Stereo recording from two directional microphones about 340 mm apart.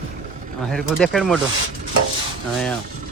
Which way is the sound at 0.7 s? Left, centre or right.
Centre.